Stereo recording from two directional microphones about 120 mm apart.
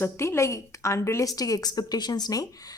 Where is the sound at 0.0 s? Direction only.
25° left (ahead or behind).